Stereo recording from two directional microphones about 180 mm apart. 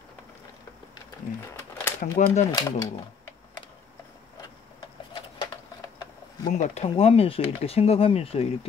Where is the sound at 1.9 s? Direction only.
40° left (ahead or behind).